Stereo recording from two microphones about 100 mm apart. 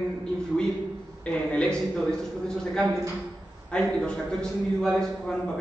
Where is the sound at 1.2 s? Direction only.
10° left (ahead or behind).